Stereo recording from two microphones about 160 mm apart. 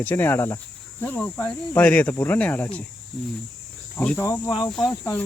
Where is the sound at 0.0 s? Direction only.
10° left (ahead or behind).